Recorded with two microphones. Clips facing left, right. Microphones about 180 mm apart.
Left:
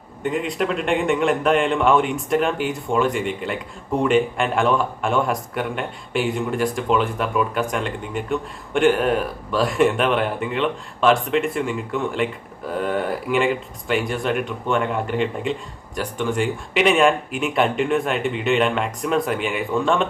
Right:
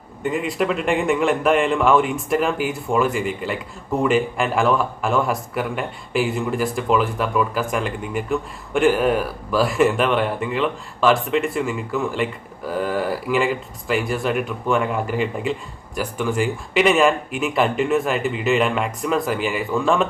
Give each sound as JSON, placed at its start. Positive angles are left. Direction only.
{"t": 0.2, "sound": "speech", "side_deg": -5}